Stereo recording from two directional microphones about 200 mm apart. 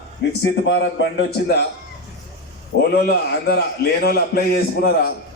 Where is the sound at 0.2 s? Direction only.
55° left (ahead or behind).